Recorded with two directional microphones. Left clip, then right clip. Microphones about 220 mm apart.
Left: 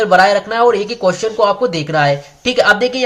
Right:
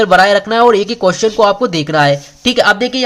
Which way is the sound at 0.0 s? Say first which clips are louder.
Right 2 dB; 35° right (ahead or behind).